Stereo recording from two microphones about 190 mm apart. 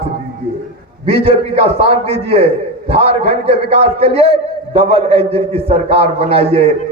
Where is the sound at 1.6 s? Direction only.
30° right (ahead or behind).